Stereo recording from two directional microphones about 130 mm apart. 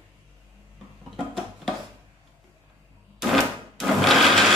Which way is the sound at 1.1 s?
Centre (ahead or behind).